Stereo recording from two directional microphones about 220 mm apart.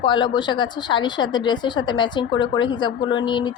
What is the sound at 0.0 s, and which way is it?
A woman's voice, 20° left (ahead or behind).